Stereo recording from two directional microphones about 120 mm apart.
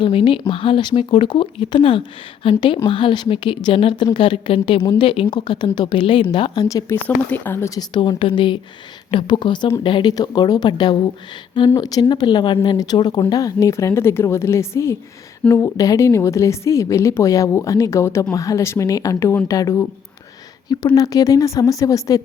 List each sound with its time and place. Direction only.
0.0 s speech: 45° left (ahead or behind)
6.7 s speech: 25° left (ahead or behind)
6.9 s speech: 15° left (ahead or behind)
7.8 s speech: 40° left (ahead or behind)